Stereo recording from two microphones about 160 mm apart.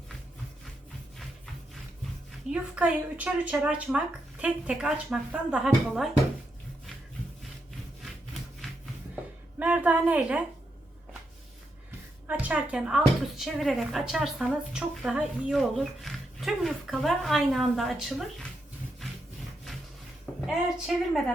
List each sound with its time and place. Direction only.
2.5 s speech: 5° right (ahead or behind)
9.6 s a woman's voice: 10° right (ahead or behind)
12.3 s speech: 10° right (ahead or behind)
20.5 s speech: 5° right (ahead or behind)